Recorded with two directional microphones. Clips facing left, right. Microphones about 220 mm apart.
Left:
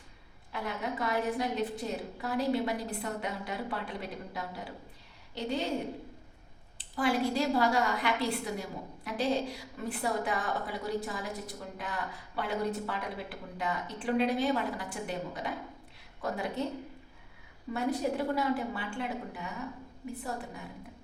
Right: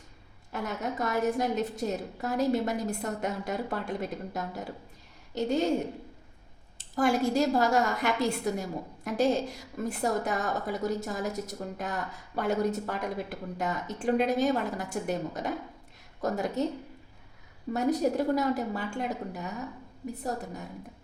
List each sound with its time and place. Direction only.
0.5 s a woman's voice: 45° right (ahead or behind)
6.7 s a woman's voice: 45° right (ahead or behind)
17.7 s a woman's voice: 40° right (ahead or behind)